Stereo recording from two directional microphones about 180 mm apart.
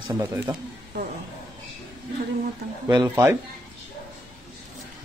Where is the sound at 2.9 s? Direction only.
20° right (ahead or behind).